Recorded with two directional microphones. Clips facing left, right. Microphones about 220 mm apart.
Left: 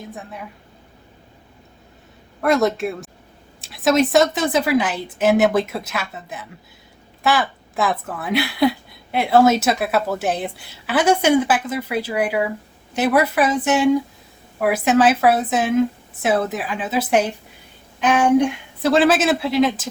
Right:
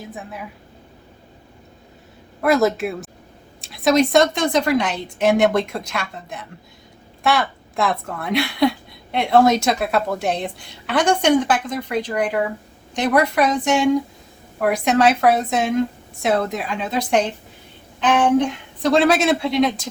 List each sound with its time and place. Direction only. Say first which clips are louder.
0.0 s a woman's voice: right 1 dB; centre (ahead or behind)
2.4 s a woman's voice: right 1 dB; centre (ahead or behind)